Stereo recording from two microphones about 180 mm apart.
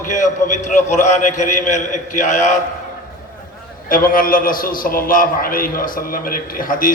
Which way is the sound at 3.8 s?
50° left (ahead or behind).